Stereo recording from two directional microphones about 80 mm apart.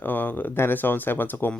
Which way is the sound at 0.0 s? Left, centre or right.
Left.